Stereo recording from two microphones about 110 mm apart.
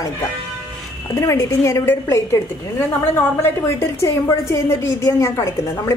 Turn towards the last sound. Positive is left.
turn(degrees=30)  # may be behind; listen again after turning